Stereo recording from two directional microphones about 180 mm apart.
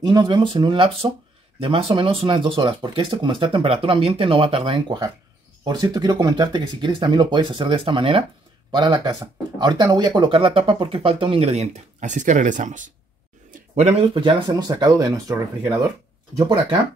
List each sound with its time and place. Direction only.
0.0 s speech: 25° right (ahead or behind)
14.8 s speech: 20° right (ahead or behind)